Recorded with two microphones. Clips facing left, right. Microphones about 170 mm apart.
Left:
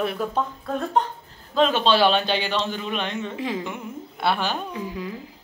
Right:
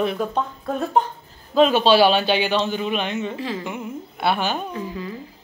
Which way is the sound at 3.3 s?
15° left (ahead or behind).